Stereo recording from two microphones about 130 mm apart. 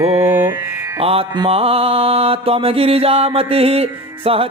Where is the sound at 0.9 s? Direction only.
50° right (ahead or behind).